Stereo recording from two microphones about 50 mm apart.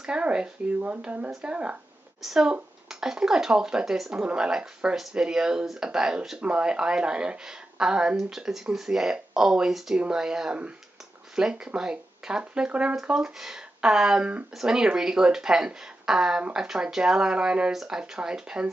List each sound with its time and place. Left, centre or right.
0.0 s speech: centre
2.2 s speech: centre